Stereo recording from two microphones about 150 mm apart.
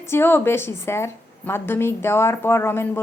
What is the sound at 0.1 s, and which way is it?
A woman's voice, 15° left (ahead or behind).